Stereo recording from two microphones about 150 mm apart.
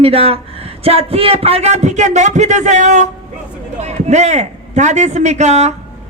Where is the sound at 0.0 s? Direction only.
40° right (ahead or behind).